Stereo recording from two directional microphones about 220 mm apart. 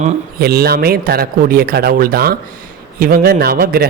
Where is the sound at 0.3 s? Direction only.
45° right (ahead or behind).